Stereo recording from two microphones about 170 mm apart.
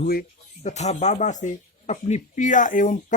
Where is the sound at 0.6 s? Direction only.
45° left (ahead or behind).